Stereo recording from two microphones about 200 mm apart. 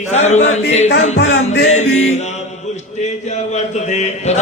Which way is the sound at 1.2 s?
70° left (ahead or behind).